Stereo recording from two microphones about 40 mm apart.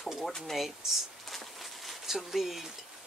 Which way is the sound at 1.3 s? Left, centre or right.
Centre.